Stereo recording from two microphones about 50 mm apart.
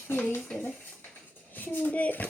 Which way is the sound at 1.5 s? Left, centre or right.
Left.